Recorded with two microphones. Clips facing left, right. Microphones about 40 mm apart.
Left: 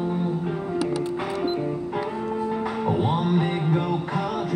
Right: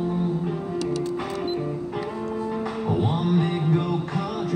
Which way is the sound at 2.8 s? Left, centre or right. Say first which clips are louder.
Left 1 dB; centre.